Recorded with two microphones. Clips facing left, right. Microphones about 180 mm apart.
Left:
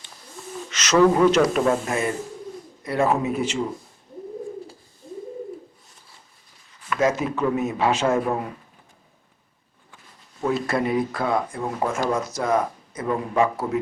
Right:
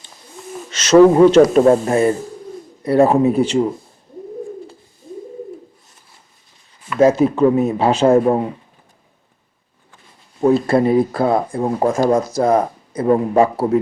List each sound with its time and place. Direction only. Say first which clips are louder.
0.7 s speech: right 8 dB; 30° right (ahead or behind)
7.0 s speech: right 10 dB; 30° right (ahead or behind)
10.4 s speech: right 9 dB; 30° right (ahead or behind)